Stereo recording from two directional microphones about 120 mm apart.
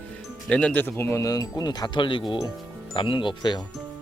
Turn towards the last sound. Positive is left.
turn(degrees=40)  # may be behind; listen again after turning